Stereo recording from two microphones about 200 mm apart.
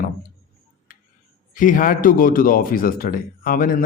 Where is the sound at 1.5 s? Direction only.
40° left (ahead or behind).